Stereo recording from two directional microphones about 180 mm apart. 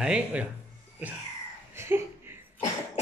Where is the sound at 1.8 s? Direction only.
15° right (ahead or behind).